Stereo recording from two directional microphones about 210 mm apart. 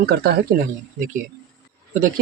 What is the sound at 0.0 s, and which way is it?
Speech, 50° right (ahead or behind).